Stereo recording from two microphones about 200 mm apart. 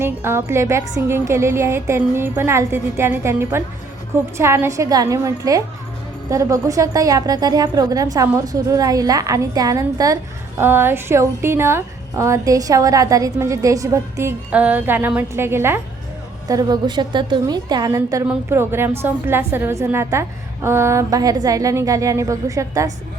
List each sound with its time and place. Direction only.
0.0 s a woman's voice: 10° right (ahead or behind)